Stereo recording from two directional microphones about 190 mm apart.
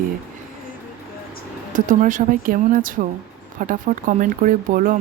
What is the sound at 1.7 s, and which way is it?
A woman's voice, 40° right (ahead or behind).